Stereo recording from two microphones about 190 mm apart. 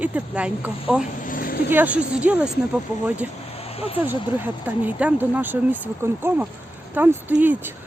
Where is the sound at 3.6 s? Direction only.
30° left (ahead or behind).